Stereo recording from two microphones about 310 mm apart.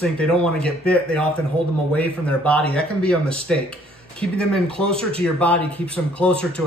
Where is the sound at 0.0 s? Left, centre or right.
Centre.